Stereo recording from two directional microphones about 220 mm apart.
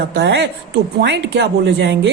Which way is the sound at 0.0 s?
50° right (ahead or behind).